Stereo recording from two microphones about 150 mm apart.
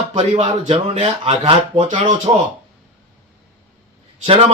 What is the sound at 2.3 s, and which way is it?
Speech, 35° right (ahead or behind).